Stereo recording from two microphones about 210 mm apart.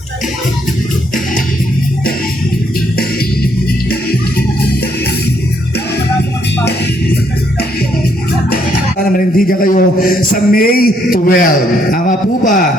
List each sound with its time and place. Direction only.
3.8 s music: 45° left (ahead or behind)
9.1 s a sound: 40° left (ahead or behind)
11.9 s a man's voice: 40° left (ahead or behind)